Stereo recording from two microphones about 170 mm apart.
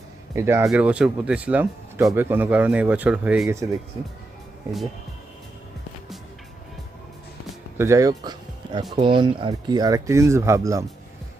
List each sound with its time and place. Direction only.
0.3 s speech: 15° right (ahead or behind)
7.8 s speech: 20° right (ahead or behind)